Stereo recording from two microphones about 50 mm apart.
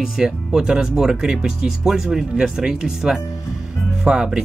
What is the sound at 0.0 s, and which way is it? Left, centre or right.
Speech, centre.